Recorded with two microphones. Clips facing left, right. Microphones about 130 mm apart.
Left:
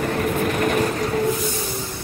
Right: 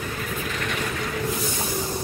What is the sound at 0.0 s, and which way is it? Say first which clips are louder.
Vehicle: left 9 dB; 60° left (ahead or behind).